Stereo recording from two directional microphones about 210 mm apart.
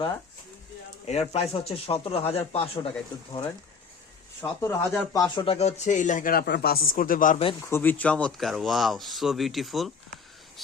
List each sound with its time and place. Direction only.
1.0 s speech: 30° left (ahead or behind)
4.4 s speech: 10° left (ahead or behind); by 7.4 s 40° left (ahead or behind)
7.6 s speech: 10° left (ahead or behind)